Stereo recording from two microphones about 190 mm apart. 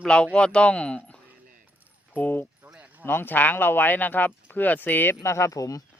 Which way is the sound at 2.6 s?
10° right (ahead or behind).